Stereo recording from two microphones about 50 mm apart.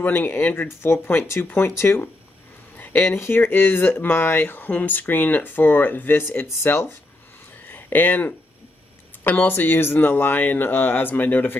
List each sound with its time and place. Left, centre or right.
0.0 s speech: left
0.7 s speech: left
2.8 s a sound: left
3.1 s speech: left
7.6 s speech: left
9.5 s speech: left